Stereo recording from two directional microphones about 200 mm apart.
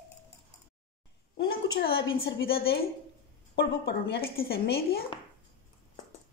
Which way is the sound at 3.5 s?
55° left (ahead or behind).